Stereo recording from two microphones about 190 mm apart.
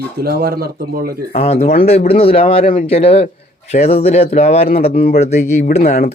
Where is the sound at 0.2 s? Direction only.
55° right (ahead or behind).